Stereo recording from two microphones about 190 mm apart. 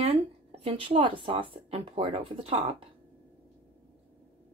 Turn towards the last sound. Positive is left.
turn(degrees=-30)  # may be behind; listen again after turning